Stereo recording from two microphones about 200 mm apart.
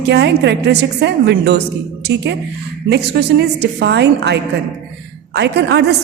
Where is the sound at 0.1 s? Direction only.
60° right (ahead or behind).